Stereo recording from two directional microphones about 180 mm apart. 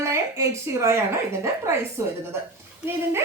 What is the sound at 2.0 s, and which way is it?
Speech, 15° right (ahead or behind).